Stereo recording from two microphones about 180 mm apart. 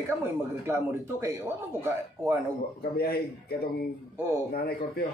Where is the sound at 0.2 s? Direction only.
15° right (ahead or behind).